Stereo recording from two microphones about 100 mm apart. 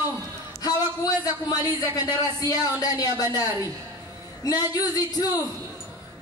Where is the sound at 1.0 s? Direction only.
40° left (ahead or behind).